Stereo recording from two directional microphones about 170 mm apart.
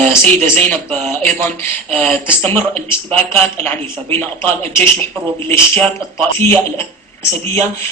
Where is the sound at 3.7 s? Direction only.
10° left (ahead or behind).